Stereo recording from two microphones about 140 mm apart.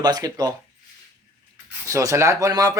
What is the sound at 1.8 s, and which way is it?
Speech, 20° right (ahead or behind).